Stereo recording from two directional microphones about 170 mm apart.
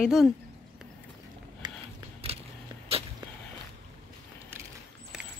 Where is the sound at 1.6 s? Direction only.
25° right (ahead or behind).